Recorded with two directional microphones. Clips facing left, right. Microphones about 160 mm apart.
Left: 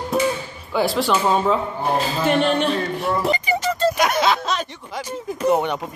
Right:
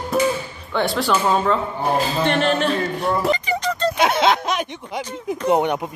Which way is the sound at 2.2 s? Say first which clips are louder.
Left 3 dB; centre (ahead or behind).